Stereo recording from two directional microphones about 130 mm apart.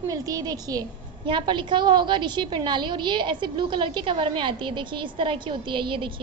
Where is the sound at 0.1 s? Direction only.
25° right (ahead or behind).